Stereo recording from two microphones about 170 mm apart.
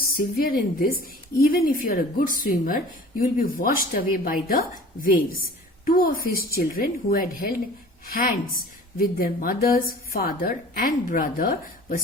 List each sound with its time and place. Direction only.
0.3 s a woman's voice: 60° left (ahead or behind)